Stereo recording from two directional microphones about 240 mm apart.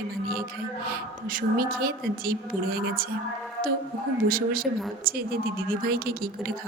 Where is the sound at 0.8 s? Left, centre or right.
Right.